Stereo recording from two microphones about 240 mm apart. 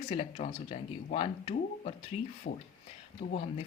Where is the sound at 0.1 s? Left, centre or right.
Left.